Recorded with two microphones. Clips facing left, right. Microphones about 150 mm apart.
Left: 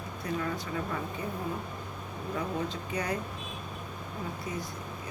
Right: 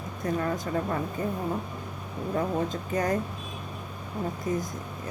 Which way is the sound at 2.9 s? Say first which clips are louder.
Right 7 dB; 45° right (ahead or behind).